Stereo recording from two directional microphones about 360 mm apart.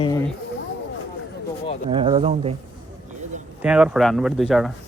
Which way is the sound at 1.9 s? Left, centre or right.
Centre.